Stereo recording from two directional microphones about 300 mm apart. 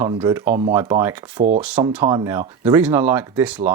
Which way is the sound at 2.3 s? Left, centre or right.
Centre.